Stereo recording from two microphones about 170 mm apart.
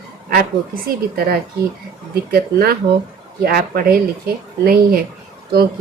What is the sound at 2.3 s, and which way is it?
A woman's voice, 60° right (ahead or behind).